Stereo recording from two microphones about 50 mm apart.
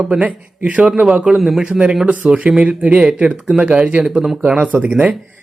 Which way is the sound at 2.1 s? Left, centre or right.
Right.